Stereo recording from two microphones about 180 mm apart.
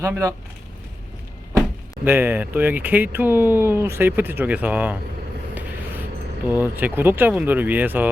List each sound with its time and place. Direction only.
0.0 s speech: 15° right (ahead or behind)
2.0 s speech: 10° right (ahead or behind)
5.5 s a sound: 10° right (ahead or behind)
6.5 s speech: 10° right (ahead or behind)